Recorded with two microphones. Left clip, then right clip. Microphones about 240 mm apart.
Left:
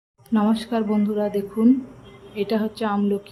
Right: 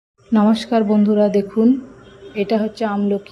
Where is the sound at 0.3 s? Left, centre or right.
Centre.